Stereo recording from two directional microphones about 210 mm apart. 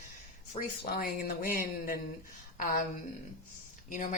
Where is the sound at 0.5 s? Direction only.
40° left (ahead or behind).